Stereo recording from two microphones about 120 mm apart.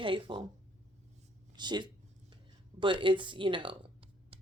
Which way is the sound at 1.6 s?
40° right (ahead or behind).